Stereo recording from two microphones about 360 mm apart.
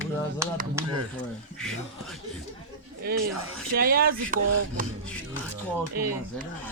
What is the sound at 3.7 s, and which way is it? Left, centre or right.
Speech, right.